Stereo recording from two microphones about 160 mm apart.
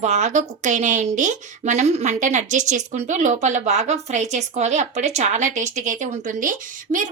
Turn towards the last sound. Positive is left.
turn(degrees=-55)  # may be behind; listen again after turning